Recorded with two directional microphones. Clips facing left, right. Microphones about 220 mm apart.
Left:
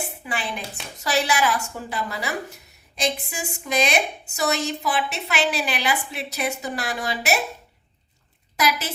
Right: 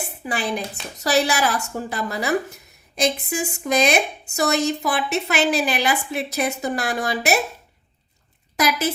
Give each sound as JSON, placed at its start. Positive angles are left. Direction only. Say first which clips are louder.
{"t": 0.3, "sound": "a woman's voice", "louder": "right 7 dB", "side_deg": -40}
{"t": 8.5, "sound": "a woman's voice", "louder": "right 3 dB", "side_deg": -45}